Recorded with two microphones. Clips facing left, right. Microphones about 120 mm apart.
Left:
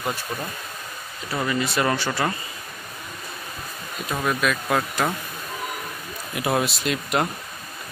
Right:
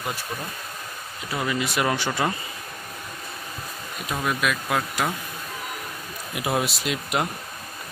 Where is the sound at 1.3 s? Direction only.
10° right (ahead or behind).